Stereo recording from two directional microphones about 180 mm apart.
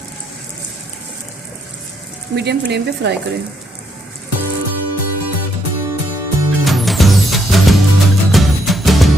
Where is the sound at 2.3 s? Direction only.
70° right (ahead or behind).